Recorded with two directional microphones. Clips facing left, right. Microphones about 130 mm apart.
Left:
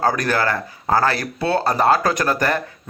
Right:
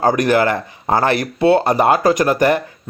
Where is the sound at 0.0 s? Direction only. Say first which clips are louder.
Right 5 dB; 15° right (ahead or behind).